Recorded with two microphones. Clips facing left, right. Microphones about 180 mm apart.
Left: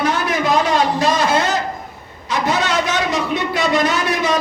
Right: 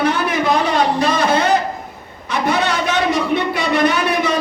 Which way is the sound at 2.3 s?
60° right (ahead or behind).